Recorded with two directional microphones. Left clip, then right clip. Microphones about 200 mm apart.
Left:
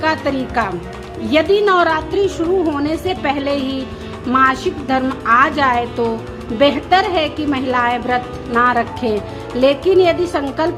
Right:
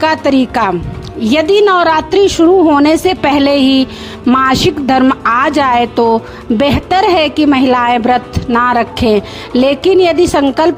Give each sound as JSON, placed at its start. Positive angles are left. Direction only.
{"t": 0.0, "sound": "a woman's voice", "side_deg": -50}